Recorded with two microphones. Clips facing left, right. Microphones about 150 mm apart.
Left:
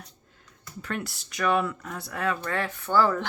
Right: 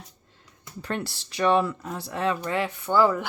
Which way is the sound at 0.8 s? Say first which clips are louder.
Right 2 dB; 30° right (ahead or behind).